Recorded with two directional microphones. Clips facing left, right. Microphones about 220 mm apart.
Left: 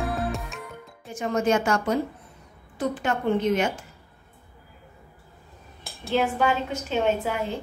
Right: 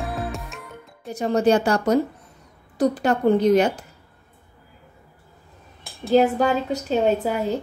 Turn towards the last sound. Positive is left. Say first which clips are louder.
# right 4 dB
turn(degrees=-40)  # may be behind; listen again after turning